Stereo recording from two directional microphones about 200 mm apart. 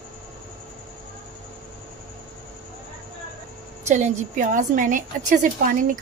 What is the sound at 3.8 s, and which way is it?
A woman's voice, 35° right (ahead or behind).